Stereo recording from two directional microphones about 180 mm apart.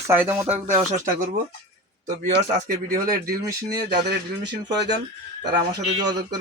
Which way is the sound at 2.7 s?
55° right (ahead or behind).